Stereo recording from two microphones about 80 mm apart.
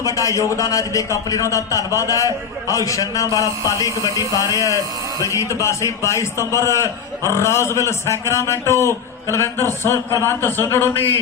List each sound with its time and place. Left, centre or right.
0.0 s a man's voice: left